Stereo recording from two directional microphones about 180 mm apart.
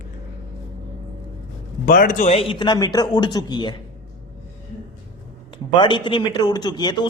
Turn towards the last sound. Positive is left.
turn(degrees=25)  # may be behind; listen again after turning